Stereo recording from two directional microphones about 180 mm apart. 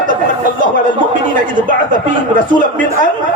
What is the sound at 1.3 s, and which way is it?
A man's voice, 45° right (ahead or behind).